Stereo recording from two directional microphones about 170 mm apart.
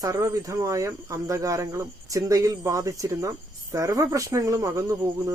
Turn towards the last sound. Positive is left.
turn(degrees=-20)  # may be behind; listen again after turning